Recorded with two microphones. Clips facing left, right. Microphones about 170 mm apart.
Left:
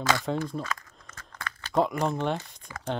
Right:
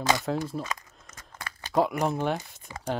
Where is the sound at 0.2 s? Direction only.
5° right (ahead or behind).